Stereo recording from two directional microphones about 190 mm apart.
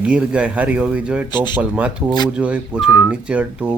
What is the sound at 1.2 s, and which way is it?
Speech, 25° left (ahead or behind).